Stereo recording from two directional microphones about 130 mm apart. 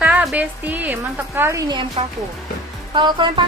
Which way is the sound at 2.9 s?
35° right (ahead or behind).